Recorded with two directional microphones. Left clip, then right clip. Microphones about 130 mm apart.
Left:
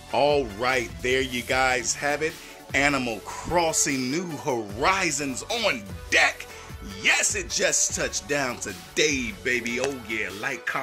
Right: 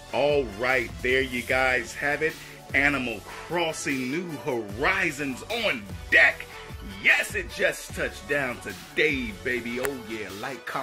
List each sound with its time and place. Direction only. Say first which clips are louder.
0.1 s speech: left 2 dB; 20° left (ahead or behind); by 4.6 s 40° left (ahead or behind)
4.7 s speech: left 1 dB; 25° left (ahead or behind)